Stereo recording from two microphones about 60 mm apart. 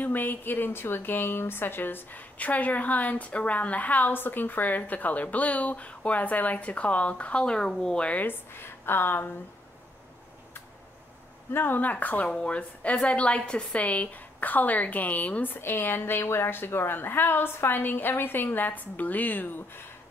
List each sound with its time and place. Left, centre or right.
0.0 s speech: left
8.3 s a woman's voice: left
11.5 s speech: left
12.3 s a woman's voice: centre; by 19.8 s left